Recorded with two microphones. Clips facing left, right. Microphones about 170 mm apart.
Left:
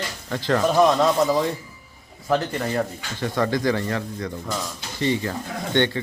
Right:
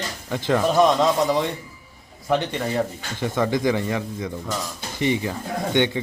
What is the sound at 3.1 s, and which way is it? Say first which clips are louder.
Speech: right 1 dB; 15° right (ahead or behind).